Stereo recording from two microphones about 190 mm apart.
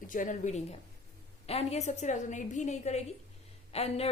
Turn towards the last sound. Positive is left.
turn(degrees=30)  # may be behind; listen again after turning